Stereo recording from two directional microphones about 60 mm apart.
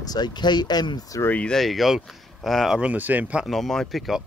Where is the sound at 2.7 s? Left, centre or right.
Right.